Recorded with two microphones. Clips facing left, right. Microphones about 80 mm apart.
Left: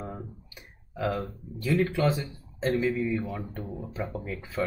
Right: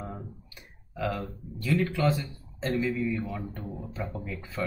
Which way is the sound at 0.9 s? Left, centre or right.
Centre.